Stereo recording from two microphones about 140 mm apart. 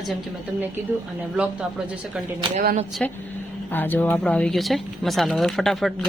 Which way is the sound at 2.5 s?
90° right.